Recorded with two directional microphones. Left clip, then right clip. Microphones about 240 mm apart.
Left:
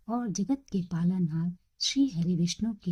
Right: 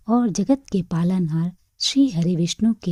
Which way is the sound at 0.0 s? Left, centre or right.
Right.